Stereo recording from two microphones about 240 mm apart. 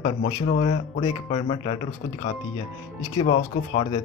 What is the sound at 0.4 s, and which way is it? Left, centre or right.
Speech, left.